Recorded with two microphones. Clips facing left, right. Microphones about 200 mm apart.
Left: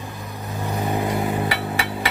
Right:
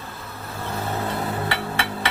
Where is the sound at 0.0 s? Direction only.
15° left (ahead or behind).